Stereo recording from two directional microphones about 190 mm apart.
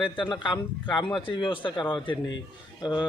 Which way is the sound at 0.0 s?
25° left (ahead or behind).